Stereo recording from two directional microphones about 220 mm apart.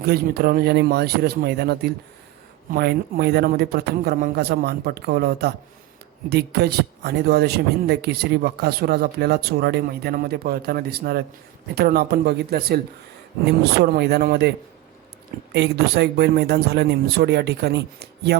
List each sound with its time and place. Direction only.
0.0 s speech: 45° right (ahead or behind)
15.5 s speech: 50° right (ahead or behind)